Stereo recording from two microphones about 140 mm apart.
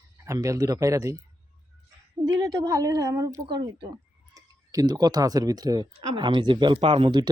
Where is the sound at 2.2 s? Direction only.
30° right (ahead or behind).